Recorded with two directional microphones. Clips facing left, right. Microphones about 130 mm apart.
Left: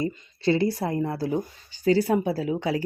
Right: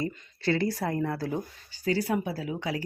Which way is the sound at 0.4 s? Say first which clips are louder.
Left 4 dB; 20° left (ahead or behind).